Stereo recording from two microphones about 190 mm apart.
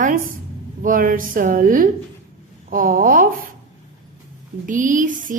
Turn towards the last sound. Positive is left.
turn(degrees=-45)  # may be behind; listen again after turning